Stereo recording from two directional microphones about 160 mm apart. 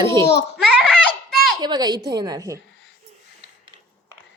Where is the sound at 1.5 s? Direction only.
25° right (ahead or behind).